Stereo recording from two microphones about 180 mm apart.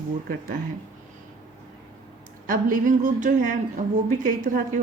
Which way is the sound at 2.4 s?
45° right (ahead or behind).